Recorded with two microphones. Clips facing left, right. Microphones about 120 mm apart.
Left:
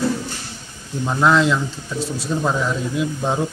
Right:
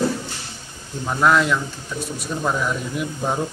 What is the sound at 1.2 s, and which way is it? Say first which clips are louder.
Speech: left 1 dB; 20° left (ahead or behind).